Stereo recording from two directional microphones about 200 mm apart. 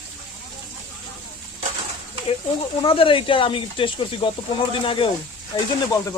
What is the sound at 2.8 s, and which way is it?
Speech, 25° left (ahead or behind).